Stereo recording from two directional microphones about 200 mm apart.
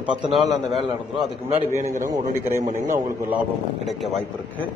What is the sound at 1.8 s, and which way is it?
Speech, 40° right (ahead or behind).